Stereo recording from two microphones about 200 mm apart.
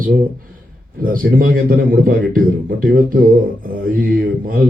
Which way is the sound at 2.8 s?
45° right (ahead or behind).